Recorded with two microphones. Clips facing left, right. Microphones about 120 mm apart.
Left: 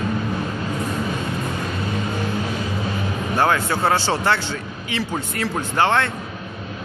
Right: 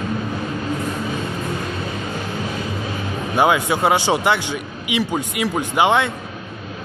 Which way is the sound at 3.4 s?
15° right (ahead or behind).